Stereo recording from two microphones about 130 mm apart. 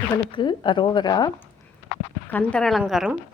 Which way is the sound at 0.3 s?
40° left (ahead or behind).